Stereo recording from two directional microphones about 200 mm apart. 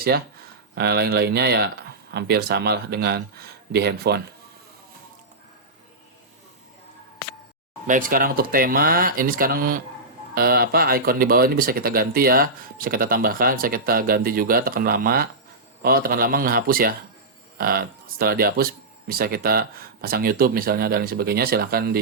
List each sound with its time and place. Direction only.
0.8 s speech: 55° right (ahead or behind)
7.9 s speech: 45° right (ahead or behind)